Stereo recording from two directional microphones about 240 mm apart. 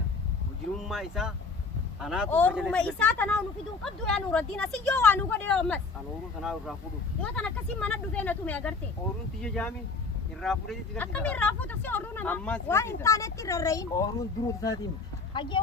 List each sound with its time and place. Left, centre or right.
0.8 s speech: centre